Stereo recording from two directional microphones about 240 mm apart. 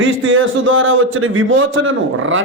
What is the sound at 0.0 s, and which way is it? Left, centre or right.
A man's voice, right.